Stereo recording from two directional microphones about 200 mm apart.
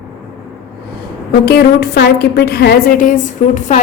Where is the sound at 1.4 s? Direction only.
55° left (ahead or behind).